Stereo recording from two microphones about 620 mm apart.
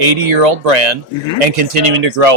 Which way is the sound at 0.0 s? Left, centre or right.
Right.